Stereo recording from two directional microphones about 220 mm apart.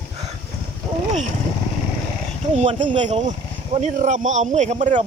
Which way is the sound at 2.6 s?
35° right (ahead or behind).